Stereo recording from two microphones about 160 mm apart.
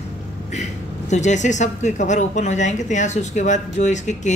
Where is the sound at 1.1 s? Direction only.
50° left (ahead or behind).